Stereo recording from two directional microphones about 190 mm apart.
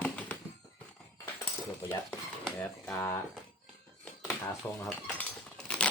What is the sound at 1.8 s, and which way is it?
Speech, 10° left (ahead or behind).